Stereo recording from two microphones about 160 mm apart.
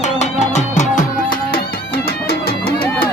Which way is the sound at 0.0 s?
45° left (ahead or behind).